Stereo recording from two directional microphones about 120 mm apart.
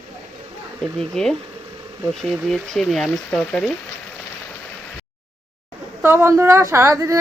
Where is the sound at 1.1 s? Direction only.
5° left (ahead or behind).